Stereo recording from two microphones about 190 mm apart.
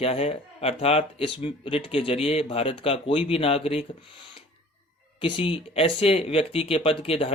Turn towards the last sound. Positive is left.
turn(degrees=30)  # may be behind; listen again after turning